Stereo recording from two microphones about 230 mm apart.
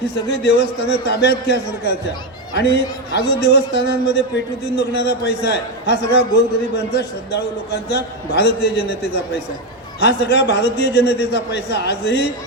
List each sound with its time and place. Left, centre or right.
0.0 s a man's voice: left